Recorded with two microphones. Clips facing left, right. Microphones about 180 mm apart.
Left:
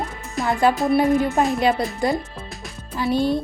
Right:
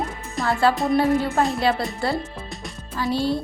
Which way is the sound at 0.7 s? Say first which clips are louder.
Left 2 dB; centre (ahead or behind).